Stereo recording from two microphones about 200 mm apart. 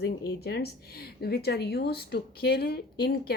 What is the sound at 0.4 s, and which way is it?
Speech, 50° left (ahead or behind).